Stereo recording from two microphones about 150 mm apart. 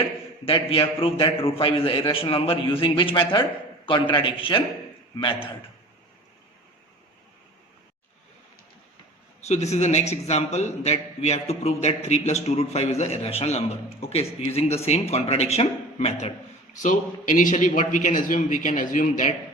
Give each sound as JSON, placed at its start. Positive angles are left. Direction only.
{"t": 0.4, "sound": "a man's voice", "side_deg": 35}
{"t": 9.5, "sound": "a man's voice", "side_deg": 50}
{"t": 16.8, "sound": "a man's voice", "side_deg": 60}